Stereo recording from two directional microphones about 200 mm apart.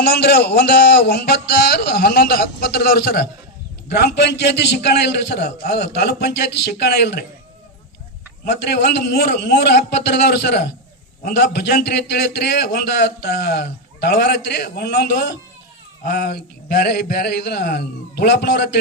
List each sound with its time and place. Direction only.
0.0 s a man's voice: 55° left (ahead or behind)
8.4 s a man's voice: 55° left (ahead or behind)